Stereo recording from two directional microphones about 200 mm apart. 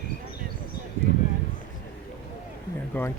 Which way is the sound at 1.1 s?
45° left (ahead or behind).